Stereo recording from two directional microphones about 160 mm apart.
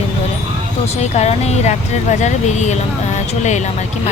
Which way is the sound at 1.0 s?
45° left (ahead or behind).